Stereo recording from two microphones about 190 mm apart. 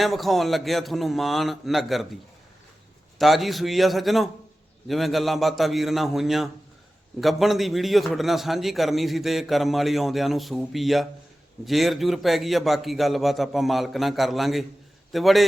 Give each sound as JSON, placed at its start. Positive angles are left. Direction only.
{"t": 0.0, "sound": "a man's voice", "side_deg": 0}
{"t": 3.2, "sound": "a man's voice", "side_deg": 0}